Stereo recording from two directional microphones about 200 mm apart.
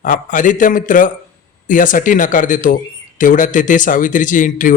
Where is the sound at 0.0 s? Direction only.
40° left (ahead or behind).